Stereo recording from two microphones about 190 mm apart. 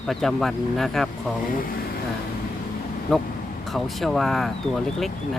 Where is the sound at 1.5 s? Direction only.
50° left (ahead or behind).